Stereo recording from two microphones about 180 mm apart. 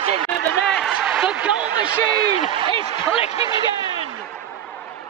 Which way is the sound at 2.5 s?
30° right (ahead or behind).